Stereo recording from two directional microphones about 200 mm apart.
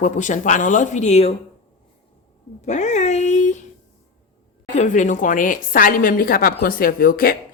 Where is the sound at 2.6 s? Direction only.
35° left (ahead or behind).